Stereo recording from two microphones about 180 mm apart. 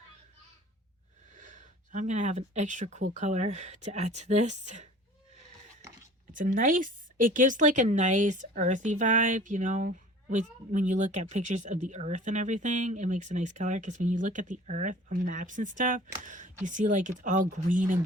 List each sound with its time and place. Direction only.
1.3 s speech: 45° right (ahead or behind)
6.3 s speech: 50° right (ahead or behind)